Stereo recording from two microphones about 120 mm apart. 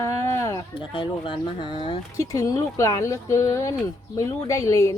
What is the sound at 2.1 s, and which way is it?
Speech, 30° left (ahead or behind).